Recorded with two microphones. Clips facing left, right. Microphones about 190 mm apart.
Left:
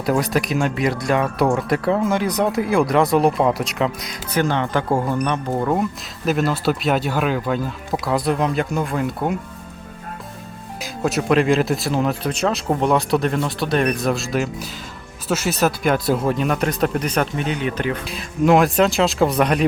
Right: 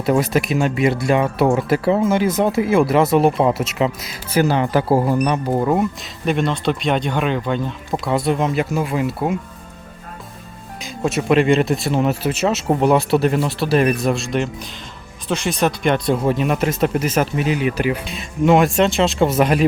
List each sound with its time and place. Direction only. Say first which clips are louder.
0.0 s speech: right 2 dB; centre (ahead or behind)
10.8 s speech: even; centre (ahead or behind)
18.0 s speech: right 1 dB; centre (ahead or behind)